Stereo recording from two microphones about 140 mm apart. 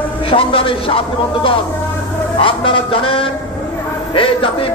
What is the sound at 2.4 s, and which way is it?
Speech, 40° left (ahead or behind).